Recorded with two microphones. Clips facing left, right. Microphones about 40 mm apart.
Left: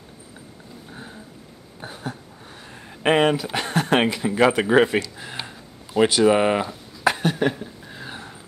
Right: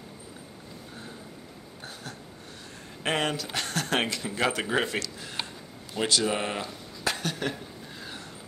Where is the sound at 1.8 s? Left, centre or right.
Centre.